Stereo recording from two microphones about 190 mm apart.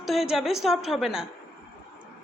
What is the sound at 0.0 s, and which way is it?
A woman's voice, centre (ahead or behind).